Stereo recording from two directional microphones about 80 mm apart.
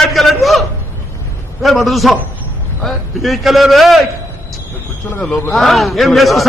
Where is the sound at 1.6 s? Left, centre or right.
Centre.